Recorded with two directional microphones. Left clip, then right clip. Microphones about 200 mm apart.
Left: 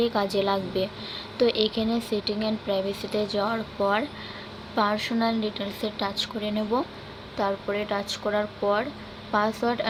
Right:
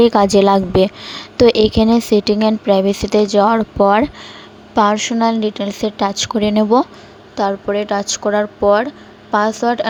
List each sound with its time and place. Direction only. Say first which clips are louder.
0.0 s a woman's voice: right 14 dB; 55° right (ahead or behind)
7.3 s speech: right 10 dB; 40° right (ahead or behind)